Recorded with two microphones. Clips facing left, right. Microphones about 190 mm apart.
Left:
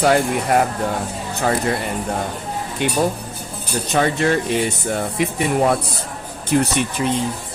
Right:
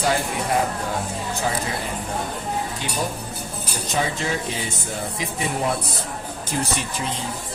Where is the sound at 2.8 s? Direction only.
65° left (ahead or behind).